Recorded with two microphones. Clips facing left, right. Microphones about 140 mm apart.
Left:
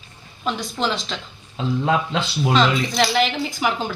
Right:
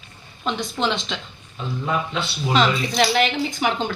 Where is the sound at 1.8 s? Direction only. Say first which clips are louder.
Left 1 dB; 90° left.